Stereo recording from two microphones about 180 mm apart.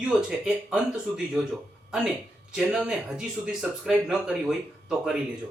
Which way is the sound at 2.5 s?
5° right (ahead or behind).